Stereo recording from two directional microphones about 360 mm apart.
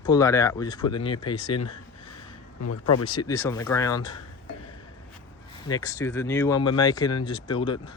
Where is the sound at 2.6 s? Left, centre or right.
Left.